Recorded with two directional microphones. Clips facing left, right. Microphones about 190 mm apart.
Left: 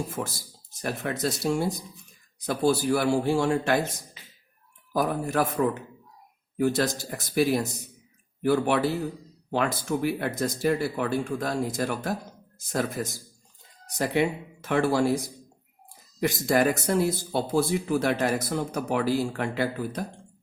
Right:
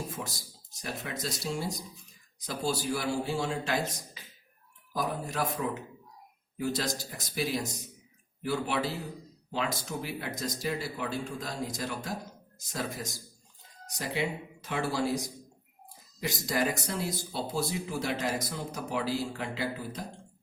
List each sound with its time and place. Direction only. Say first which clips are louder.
0.2 s speech: left 7 dB; 70° left (ahead or behind)
0.8 s speech: left 8 dB; 60° left (ahead or behind)
4.9 s speech: left 7 dB; 60° left (ahead or behind)
16.5 s speech: left 8 dB; 55° left (ahead or behind)